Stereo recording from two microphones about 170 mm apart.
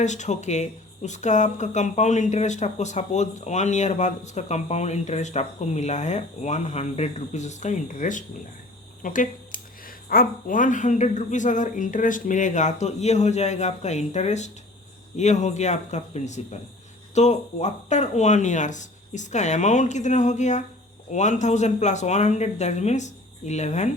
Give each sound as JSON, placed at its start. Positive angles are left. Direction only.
{"t": 0.0, "sound": "speech", "side_deg": 45}